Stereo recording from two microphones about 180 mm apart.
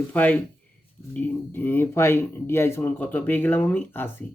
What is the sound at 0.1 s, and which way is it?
A man's voice, 10° left (ahead or behind).